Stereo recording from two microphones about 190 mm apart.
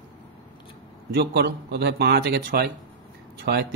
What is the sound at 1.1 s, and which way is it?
A man's voice, 60° right (ahead or behind).